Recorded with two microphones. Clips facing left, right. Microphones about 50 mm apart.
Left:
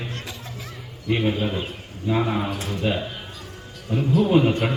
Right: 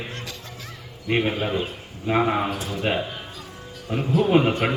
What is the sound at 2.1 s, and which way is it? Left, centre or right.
Speech, right.